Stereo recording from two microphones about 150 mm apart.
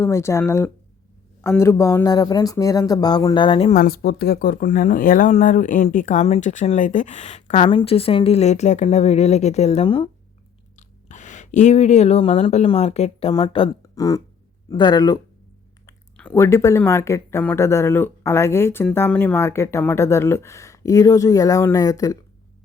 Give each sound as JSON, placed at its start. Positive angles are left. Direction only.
{"t": 0.0, "sound": "speech", "side_deg": 20}
{"t": 3.8, "sound": "speech", "side_deg": 85}
{"t": 7.7, "sound": "a woman's voice", "side_deg": 35}
{"t": 10.8, "sound": "speech", "side_deg": 55}
{"t": 13.3, "sound": "speech", "side_deg": 30}
{"t": 16.1, "sound": "speech", "side_deg": 15}